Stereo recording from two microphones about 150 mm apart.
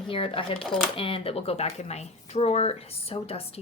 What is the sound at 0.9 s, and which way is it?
A woman's voice, 35° left (ahead or behind).